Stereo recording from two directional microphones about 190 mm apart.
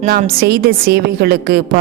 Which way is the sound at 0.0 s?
45° right (ahead or behind).